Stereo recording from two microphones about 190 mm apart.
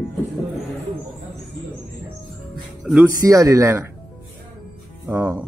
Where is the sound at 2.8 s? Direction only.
5° right (ahead or behind).